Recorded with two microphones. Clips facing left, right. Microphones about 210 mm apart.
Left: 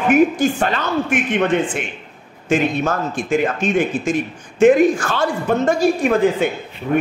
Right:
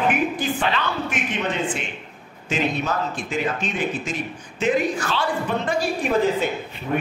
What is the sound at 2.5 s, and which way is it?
Speech, 50° left (ahead or behind).